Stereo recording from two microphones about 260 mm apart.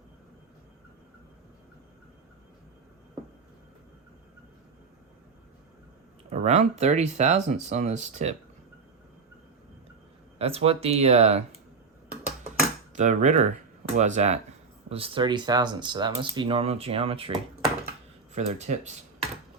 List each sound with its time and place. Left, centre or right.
6.3 s speech: right
10.3 s speech: right
13.0 s speech: right